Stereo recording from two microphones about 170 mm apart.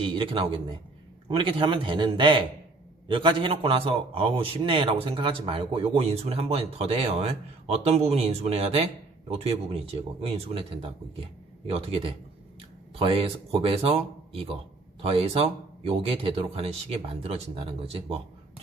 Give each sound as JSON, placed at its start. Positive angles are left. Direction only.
{"t": 0.0, "sound": "a man's voice", "side_deg": -30}